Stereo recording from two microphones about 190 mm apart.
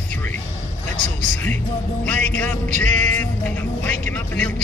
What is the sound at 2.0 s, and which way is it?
Music, 5° left (ahead or behind).